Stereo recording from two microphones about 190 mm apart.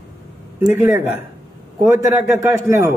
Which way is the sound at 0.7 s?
10° right (ahead or behind).